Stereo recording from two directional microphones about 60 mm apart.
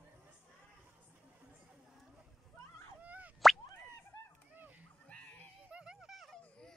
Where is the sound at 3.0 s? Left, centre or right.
Right.